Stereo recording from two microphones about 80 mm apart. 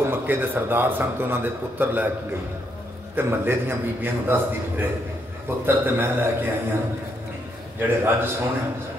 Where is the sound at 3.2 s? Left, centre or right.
Right.